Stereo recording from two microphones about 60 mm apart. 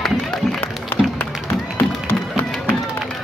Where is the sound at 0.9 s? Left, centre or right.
Left.